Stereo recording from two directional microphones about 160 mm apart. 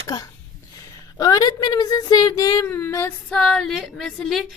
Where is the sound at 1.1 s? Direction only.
25° left (ahead or behind).